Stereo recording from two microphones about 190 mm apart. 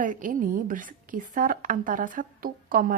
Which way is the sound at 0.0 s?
45° right (ahead or behind).